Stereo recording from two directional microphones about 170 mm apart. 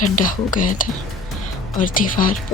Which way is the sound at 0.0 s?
50° left (ahead or behind).